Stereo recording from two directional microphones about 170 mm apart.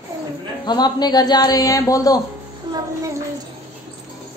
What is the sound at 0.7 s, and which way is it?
Speech, 25° left (ahead or behind).